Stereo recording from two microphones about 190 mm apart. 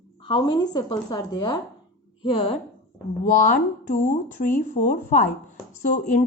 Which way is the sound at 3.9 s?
45° left (ahead or behind).